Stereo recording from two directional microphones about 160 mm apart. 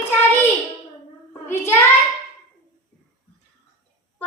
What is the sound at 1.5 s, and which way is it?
Child singing, 15° left (ahead or behind).